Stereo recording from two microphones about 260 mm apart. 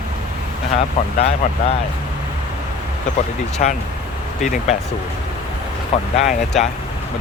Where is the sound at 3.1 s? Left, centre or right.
Left.